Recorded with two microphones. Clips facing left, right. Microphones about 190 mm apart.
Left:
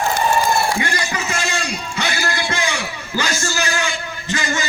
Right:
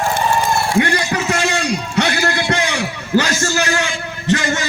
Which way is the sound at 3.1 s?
65° right (ahead or behind).